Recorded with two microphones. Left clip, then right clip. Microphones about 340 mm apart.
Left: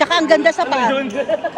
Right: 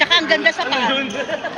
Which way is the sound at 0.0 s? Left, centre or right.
Centre.